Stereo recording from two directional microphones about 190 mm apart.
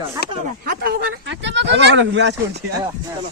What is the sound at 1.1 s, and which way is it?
Speech, 70° right (ahead or behind).